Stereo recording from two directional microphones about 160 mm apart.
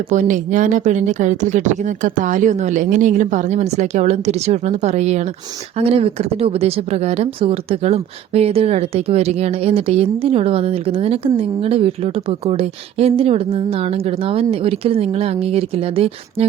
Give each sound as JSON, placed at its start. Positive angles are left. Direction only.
{"t": 0.1, "sound": "a woman's voice", "side_deg": -50}